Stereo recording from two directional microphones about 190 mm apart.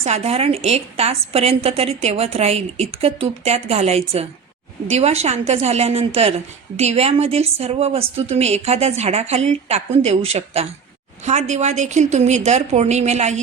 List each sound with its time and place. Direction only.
0.0 s a woman's voice: 35° right (ahead or behind)